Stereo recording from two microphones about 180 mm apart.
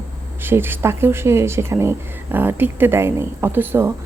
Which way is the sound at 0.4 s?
10° right (ahead or behind).